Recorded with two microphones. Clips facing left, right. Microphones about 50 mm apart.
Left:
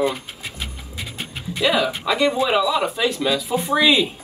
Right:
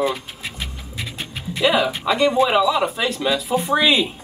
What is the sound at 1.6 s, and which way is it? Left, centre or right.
Speech, centre.